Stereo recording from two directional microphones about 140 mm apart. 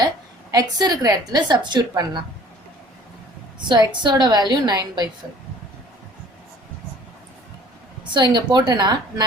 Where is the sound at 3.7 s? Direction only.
30° right (ahead or behind).